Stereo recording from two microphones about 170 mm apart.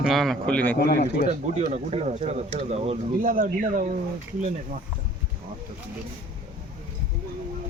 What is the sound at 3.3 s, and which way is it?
Speech, 50° right (ahead or behind).